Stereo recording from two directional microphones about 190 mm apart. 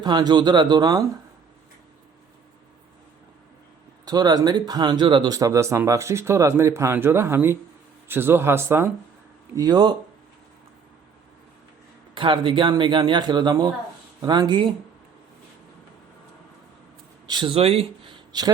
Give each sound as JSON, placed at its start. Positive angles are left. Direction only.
{"t": 0.0, "sound": "speech", "side_deg": -20}
{"t": 4.0, "sound": "speech", "side_deg": -20}
{"t": 12.1, "sound": "speech", "side_deg": -25}
{"t": 17.2, "sound": "speech", "side_deg": -25}